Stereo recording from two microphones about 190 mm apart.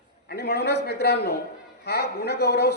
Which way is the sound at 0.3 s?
60° left (ahead or behind).